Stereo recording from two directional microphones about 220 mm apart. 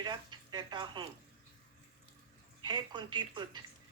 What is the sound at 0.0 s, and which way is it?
Speech, 20° right (ahead or behind).